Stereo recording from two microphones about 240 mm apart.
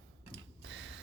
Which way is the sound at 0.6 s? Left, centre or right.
Right.